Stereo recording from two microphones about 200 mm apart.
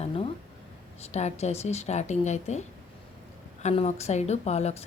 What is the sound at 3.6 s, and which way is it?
Speech, 35° left (ahead or behind).